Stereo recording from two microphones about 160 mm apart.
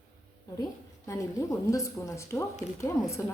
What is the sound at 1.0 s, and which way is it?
A woman's voice, 20° left (ahead or behind).